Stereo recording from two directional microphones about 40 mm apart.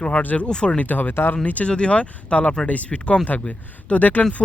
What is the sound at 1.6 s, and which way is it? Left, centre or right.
Speech, left.